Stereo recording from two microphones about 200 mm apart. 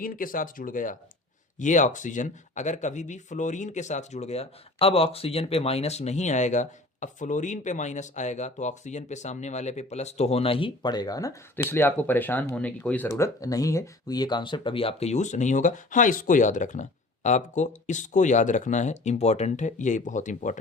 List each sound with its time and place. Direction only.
0.0 s speech: 45° left (ahead or behind)